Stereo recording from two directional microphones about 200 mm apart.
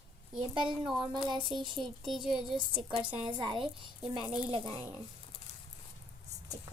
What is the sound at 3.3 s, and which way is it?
A child's voice, 20° right (ahead or behind).